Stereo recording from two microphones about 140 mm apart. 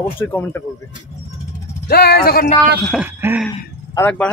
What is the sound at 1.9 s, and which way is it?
Speech, 90° left.